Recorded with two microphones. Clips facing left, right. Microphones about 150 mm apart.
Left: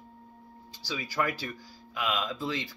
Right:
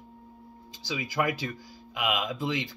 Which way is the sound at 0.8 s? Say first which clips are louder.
Right 2 dB; 20° right (ahead or behind).